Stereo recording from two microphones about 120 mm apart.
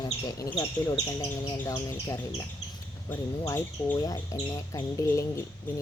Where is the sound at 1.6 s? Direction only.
25° left (ahead or behind).